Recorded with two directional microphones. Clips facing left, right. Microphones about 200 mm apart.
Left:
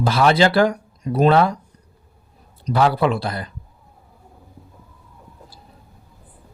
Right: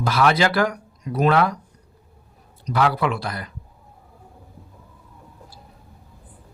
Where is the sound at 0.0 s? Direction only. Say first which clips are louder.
Left 3 dB; 30° left (ahead or behind).